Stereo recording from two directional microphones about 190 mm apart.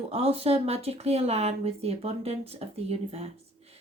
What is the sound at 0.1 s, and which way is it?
Speech, 30° right (ahead or behind).